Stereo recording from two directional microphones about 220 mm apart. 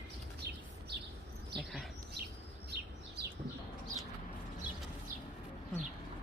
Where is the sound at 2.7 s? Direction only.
50° right (ahead or behind).